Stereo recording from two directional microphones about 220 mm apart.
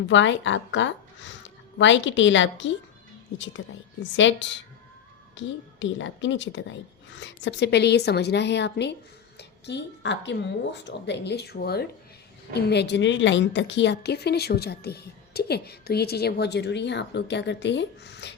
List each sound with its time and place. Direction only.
0.1 s a woman's voice: 55° left (ahead or behind)